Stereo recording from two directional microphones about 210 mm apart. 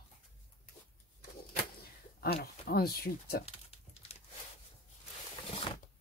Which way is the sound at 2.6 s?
45° left (ahead or behind).